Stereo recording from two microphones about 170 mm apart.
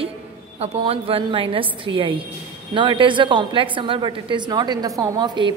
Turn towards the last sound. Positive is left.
turn(degrees=-25)  # may be behind; listen again after turning